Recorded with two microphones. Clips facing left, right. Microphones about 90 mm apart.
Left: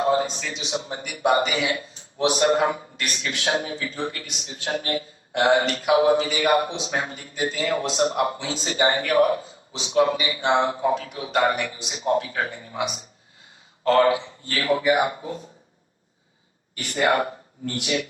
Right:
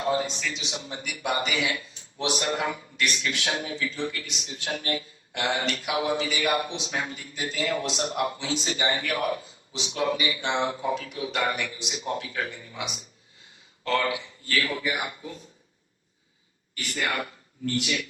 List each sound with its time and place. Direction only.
0.0 s a man's voice: 40° left (ahead or behind)
16.7 s speech: 35° left (ahead or behind)